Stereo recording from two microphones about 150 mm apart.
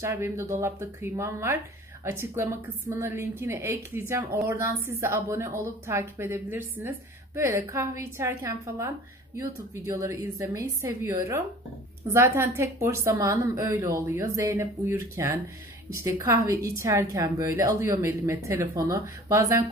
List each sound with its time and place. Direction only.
0.0 s a woman's voice: 15° right (ahead or behind)